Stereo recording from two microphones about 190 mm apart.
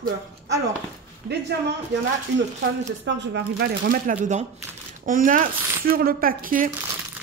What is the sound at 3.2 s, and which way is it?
Speech, 65° right (ahead or behind).